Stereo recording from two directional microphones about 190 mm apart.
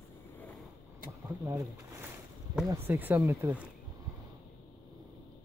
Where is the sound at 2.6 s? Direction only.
15° right (ahead or behind).